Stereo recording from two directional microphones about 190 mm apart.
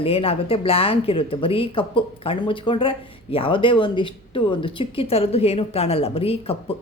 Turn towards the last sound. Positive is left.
turn(degrees=30)  # may be behind; listen again after turning